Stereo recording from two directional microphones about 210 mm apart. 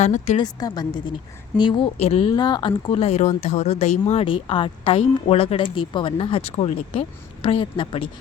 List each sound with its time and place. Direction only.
0.0 s a woman's voice: 35° left (ahead or behind)
0.3 s a woman's voice: 20° left (ahead or behind)